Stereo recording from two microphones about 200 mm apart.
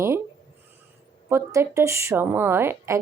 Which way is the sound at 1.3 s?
15° right (ahead or behind).